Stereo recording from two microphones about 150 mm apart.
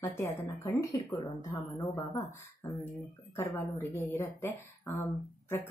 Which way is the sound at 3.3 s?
15° left (ahead or behind).